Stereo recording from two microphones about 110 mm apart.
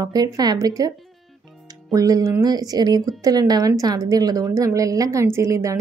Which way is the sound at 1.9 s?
30° right (ahead or behind).